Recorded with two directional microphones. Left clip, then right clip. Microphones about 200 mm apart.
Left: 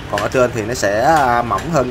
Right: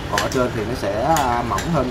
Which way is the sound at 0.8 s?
20° left (ahead or behind).